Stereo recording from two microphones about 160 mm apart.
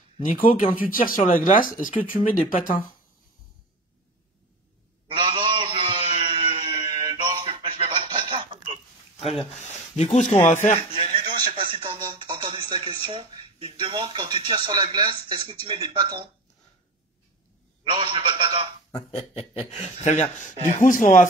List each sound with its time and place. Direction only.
0.3 s speech: 40° left (ahead or behind)
1.0 s speech: 60° left (ahead or behind)
5.0 s a sound: 35° right (ahead or behind)
9.9 s speech: 40° left (ahead or behind)
10.9 s a sound: 30° right (ahead or behind)
14.5 s a man's voice: 30° right (ahead or behind)
17.8 s a man's voice: 35° right (ahead or behind)
18.9 s speech: 25° left (ahead or behind)
19.7 s speech: 40° left (ahead or behind)